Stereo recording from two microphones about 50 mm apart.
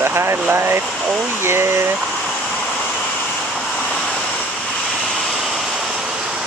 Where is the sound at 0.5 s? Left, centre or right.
Right.